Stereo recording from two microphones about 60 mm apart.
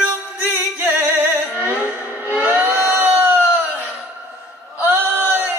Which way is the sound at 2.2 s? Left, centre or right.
Right.